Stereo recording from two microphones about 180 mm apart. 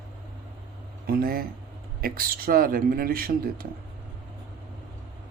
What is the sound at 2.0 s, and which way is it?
Speech, 55° right (ahead or behind).